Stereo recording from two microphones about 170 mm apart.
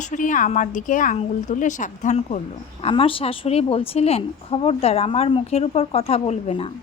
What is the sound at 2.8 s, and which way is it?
A woman's voice, 30° left (ahead or behind).